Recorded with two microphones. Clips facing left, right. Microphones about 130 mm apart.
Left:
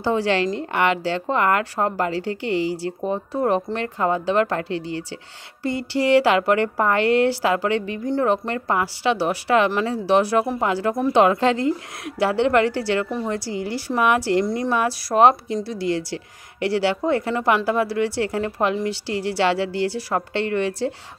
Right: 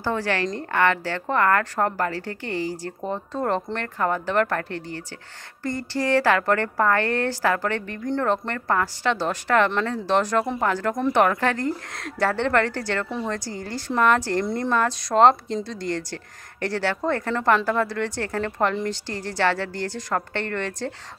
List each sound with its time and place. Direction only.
0.0 s a woman's voice: 15° left (ahead or behind)
14.4 s a woman's voice: centre (ahead or behind)